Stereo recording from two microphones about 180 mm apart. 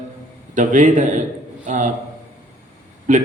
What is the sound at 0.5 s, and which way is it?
A man's voice, 45° right (ahead or behind).